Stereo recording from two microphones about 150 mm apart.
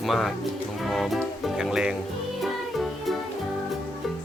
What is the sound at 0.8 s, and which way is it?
Speech, centre (ahead or behind).